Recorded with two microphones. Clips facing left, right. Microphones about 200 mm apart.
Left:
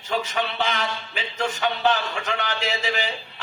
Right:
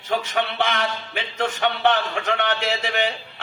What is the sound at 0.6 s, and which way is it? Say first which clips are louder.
Speech: right 2 dB; 60° right (ahead or behind).